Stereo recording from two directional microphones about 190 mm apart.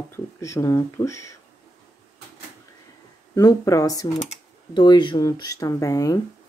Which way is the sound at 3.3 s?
20° left (ahead or behind).